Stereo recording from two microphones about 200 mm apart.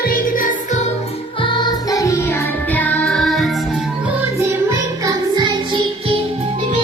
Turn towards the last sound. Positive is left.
turn(degrees=-20)  # may be behind; listen again after turning